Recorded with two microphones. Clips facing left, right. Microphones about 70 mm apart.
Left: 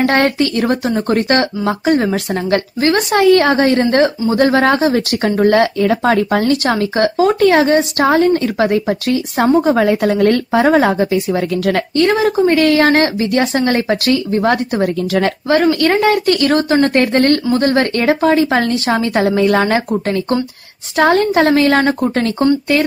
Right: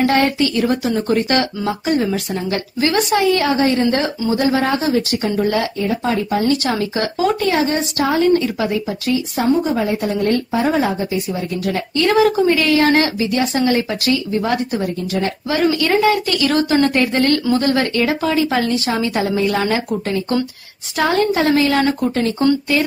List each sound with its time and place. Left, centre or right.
0.0 s speech: left
5.8 s speech: left
9.7 s speech: left
12.1 s speech: left
15.4 s speech: left
20.9 s speech: left